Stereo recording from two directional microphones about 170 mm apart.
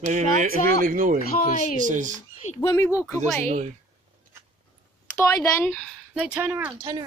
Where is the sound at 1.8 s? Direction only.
50° right (ahead or behind).